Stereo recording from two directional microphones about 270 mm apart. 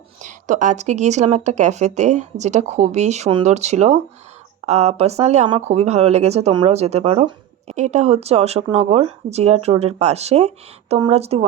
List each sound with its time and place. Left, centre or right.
0.2 s speech: right